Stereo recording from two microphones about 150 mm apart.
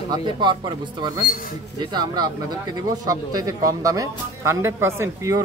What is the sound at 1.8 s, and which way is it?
Speech, 30° right (ahead or behind).